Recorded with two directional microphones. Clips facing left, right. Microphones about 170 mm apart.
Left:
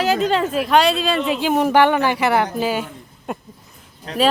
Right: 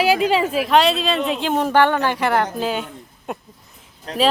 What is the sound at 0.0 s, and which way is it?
A woman's voice, 10° right (ahead or behind).